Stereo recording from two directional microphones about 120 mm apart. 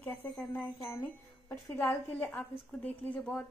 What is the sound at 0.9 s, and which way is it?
A woman's voice, 20° left (ahead or behind).